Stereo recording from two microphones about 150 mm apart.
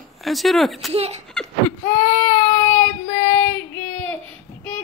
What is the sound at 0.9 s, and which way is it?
Speech, 45° right (ahead or behind).